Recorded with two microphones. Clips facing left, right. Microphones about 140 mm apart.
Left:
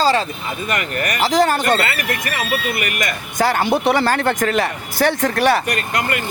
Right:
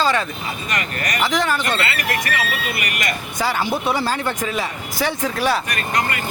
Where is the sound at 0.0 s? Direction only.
30° left (ahead or behind).